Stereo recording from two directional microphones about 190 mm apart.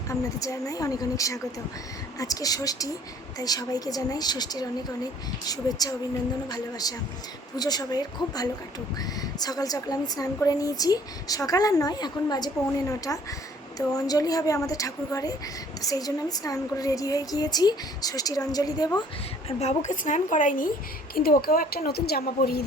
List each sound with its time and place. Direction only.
0.1 s a woman's voice: 15° left (ahead or behind)
19.5 s a woman's voice: 35° left (ahead or behind); by 22.6 s 50° left (ahead or behind)